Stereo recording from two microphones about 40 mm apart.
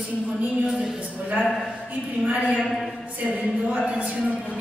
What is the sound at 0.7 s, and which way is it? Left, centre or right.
Speech, centre.